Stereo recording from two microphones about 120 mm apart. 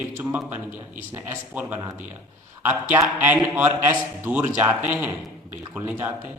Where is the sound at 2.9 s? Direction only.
15° right (ahead or behind).